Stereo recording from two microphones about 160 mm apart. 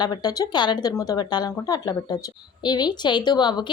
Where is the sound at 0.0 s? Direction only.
25° left (ahead or behind).